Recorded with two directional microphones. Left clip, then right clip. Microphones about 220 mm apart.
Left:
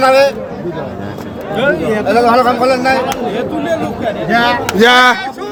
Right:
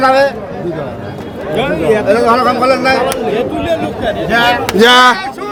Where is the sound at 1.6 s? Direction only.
10° right (ahead or behind).